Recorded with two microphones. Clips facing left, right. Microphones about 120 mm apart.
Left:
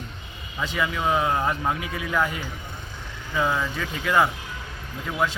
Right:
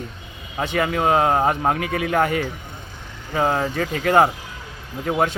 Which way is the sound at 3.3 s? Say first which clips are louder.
Right 4 dB; 50° right (ahead or behind).